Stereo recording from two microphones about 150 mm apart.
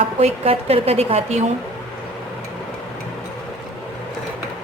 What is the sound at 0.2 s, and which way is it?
A woman's voice, 45° right (ahead or behind).